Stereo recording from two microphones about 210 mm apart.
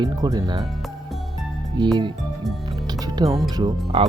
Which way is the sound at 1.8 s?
20° right (ahead or behind).